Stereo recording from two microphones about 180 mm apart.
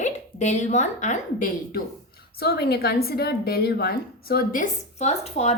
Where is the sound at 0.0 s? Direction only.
40° left (ahead or behind).